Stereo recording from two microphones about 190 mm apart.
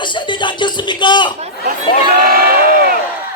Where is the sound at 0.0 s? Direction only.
25° left (ahead or behind).